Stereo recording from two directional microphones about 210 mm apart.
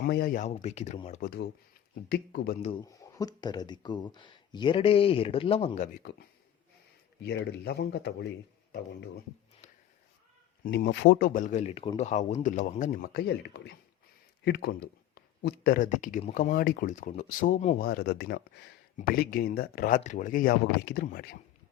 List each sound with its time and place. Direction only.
0.0 s speech: 45° left (ahead or behind)
2.0 s speech: 50° left (ahead or behind)
2.8 s speech: 15° left (ahead or behind)
7.2 s speech: 50° left (ahead or behind)
10.6 s speech: 50° left (ahead or behind)
17.8 s speech: 50° left (ahead or behind)